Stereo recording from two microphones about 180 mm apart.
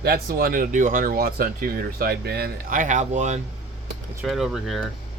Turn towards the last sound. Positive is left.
turn(degrees=0)  # may be behind; listen again after turning